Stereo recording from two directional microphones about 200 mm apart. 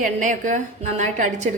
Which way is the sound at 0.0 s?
40° right (ahead or behind).